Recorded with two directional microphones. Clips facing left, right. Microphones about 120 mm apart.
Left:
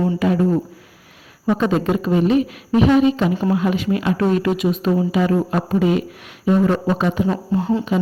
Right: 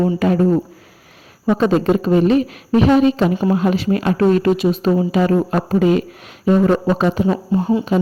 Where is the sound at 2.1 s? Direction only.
45° right (ahead or behind).